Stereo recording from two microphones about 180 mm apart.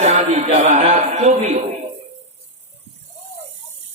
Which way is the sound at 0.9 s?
40° right (ahead or behind).